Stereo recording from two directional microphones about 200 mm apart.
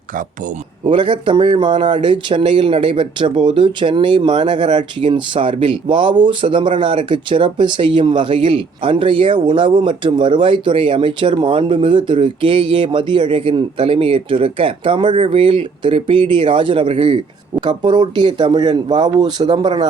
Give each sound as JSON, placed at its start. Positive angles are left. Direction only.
{"t": 0.9, "sound": "speech", "side_deg": -25}